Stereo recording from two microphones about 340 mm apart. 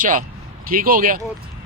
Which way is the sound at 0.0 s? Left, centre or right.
Right.